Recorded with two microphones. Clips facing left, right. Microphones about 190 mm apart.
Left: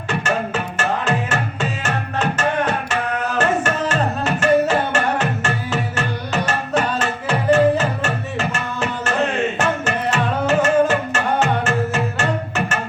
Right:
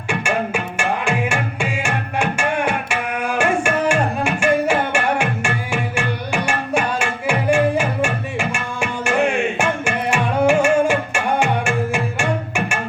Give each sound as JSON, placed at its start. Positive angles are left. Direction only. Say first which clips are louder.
{"t": 0.1, "sound": "music", "louder": "right 1 dB", "side_deg": -10}